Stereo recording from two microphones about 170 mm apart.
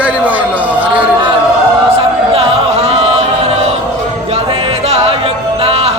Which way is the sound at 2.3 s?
35° right (ahead or behind).